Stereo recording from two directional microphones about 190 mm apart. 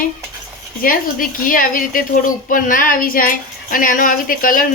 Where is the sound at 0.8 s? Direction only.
50° left (ahead or behind).